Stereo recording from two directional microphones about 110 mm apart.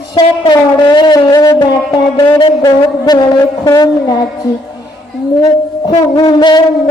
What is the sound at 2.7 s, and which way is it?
A man's voice, 40° left (ahead or behind).